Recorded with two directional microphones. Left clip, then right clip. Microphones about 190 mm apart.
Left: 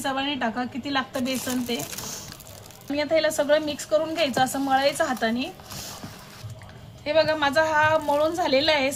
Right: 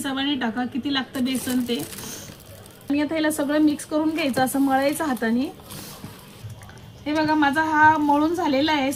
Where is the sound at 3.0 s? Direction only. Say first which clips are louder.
Left 3 dB; 35° left (ahead or behind).